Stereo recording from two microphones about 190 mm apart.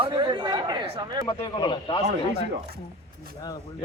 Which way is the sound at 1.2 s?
25° left (ahead or behind).